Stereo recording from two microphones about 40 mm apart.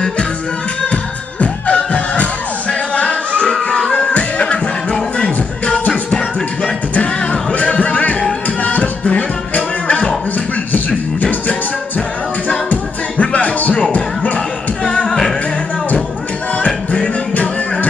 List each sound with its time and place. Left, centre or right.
1.4 s music: left
7.5 s music: left
11.1 s music: left
13.2 s music: left
15.0 s music: centre
16.5 s music: left